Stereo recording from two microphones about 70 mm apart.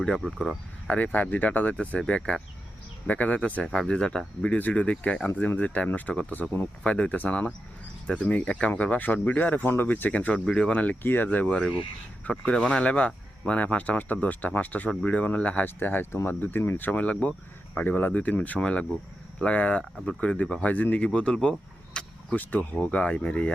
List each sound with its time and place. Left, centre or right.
0.2 s speech: centre
0.9 s speech: left
3.6 s speech: centre; by 11.4 s left
11.4 s speech: centre
22.0 s vehicle: centre
22.4 s speech: left